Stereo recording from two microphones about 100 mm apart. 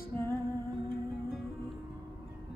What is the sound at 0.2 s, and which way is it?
Music, 30° left (ahead or behind).